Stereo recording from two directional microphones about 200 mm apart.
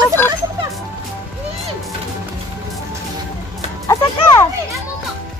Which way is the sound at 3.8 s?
15° left (ahead or behind).